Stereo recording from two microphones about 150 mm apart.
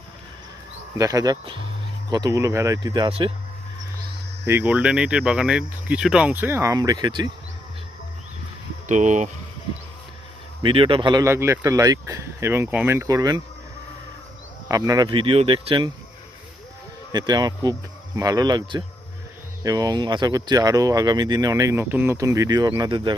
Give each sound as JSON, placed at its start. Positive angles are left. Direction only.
{"t": 0.9, "sound": "speech", "side_deg": -25}
{"t": 3.1, "sound": "speech", "side_deg": -40}
{"t": 4.4, "sound": "speech", "side_deg": -15}
{"t": 8.9, "sound": "speech", "side_deg": -55}
{"t": 10.6, "sound": "speech", "side_deg": -35}
{"t": 11.3, "sound": "speech", "side_deg": -15}
{"t": 14.7, "sound": "speech", "side_deg": -25}
{"t": 17.1, "sound": "speech", "side_deg": -25}